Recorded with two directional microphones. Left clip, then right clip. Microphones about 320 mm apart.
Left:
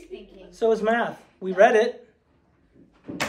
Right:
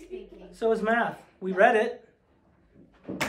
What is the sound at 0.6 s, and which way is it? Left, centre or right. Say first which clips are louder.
A man's voice: left 3 dB; centre.